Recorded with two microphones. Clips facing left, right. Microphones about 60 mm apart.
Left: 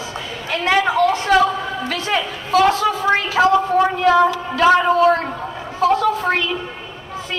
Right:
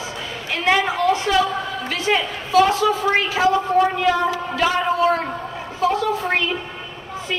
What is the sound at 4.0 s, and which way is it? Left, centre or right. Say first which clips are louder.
Speech: left 5 dB; left.